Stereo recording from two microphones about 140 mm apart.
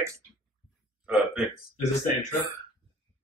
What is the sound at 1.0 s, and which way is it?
Hiccup, 5° right (ahead or behind).